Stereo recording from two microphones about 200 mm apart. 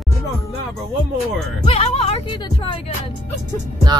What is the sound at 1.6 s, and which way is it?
Speech, 30° left (ahead or behind).